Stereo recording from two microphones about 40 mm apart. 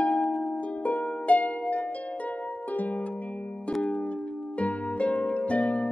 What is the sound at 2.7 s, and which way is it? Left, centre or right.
Harp, left.